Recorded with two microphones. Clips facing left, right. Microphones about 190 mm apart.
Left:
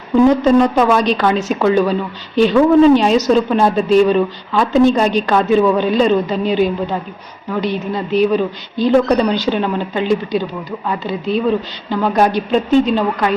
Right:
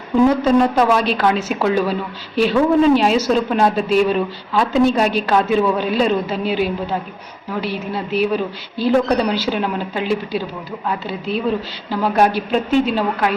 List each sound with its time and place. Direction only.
0.3 s a woman's voice: 5° right (ahead or behind)